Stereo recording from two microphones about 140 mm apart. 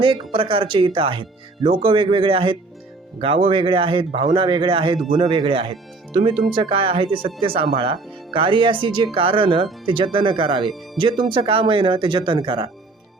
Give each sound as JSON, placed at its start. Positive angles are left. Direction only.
{"t": 0.0, "sound": "speech", "side_deg": -40}